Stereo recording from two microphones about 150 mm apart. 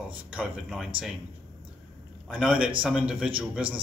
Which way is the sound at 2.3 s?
5° right (ahead or behind).